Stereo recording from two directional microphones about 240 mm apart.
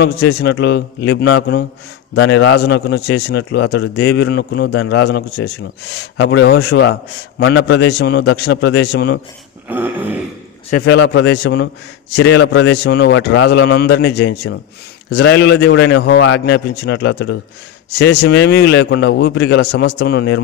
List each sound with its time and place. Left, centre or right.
0.0 s a man's voice: left
9.7 s a sound: centre
10.9 s a man's voice: left